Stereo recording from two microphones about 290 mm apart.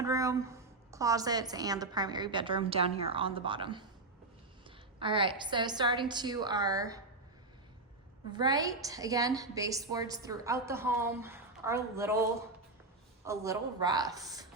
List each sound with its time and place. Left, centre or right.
0.0 s a woman's voice: centre
4.9 s a woman's voice: centre
8.3 s a woman's voice: centre
13.2 s a woman's voice: centre